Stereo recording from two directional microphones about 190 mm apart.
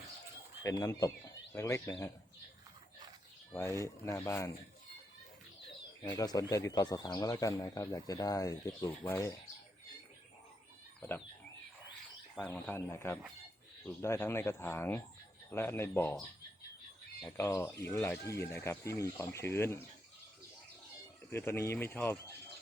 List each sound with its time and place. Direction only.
0.6 s speech: 15° left (ahead or behind)
3.5 s speech: 15° left (ahead or behind)
6.1 s speech: 20° left (ahead or behind)
12.4 s speech: 10° left (ahead or behind)
17.2 s speech: 10° left (ahead or behind)
21.2 s speech: 10° left (ahead or behind)